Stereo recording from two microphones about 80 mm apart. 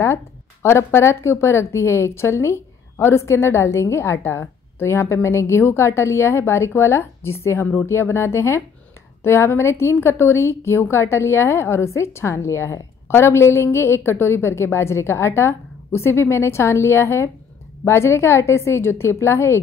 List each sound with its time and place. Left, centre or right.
0.0 s speech: left